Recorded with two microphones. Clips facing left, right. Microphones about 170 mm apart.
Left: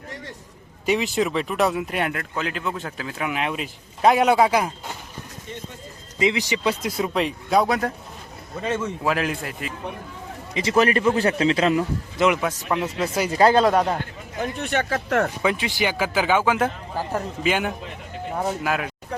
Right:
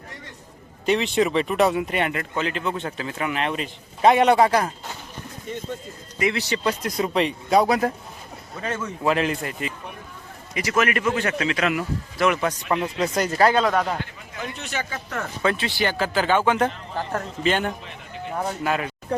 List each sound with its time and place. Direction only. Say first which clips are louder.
0.9 s speech: right 1 dB; 5° left (ahead or behind)
6.1 s speech: left 2 dB; 20° left (ahead or behind); by 7.9 s centre (ahead or behind)
9.0 s speech: right 4 dB; centre (ahead or behind)
10.5 s a man's voice: left 3 dB; 25° left (ahead or behind)
12.4 s speech: right 1 dB; centre (ahead or behind)
13.4 s a man's voice: left 3 dB; 35° left (ahead or behind)
13.7 s speech: left 3 dB; 20° left (ahead or behind)
14.3 s speech: left 6 dB; 50° left (ahead or behind); by 15.3 s 75° left (ahead or behind)
15.4 s speech: even; 15° left (ahead or behind)